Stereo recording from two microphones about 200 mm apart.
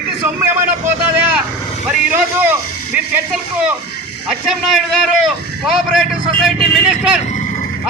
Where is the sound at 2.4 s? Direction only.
10° right (ahead or behind).